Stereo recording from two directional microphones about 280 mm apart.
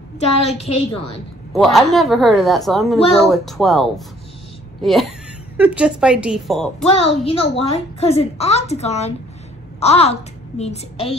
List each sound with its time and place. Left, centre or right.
0.5 s a woman's voice: left
1.5 s speech: centre
6.9 s a woman's voice: left